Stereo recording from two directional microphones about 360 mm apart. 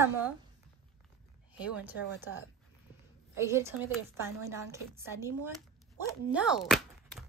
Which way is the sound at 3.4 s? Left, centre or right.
Centre.